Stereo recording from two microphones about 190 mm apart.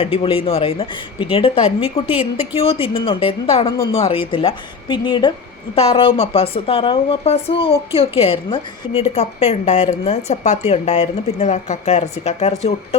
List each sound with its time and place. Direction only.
0.0 s a woman's voice: 30° left (ahead or behind)
2.0 s speech: 10° right (ahead or behind)
2.6 s a woman's voice: 30° left (ahead or behind)